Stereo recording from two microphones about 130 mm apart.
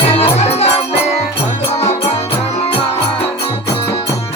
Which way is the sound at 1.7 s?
50° left (ahead or behind).